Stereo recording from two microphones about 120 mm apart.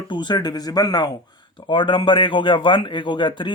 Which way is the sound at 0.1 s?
40° left (ahead or behind).